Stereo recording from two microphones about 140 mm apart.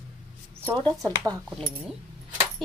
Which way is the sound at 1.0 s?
20° right (ahead or behind).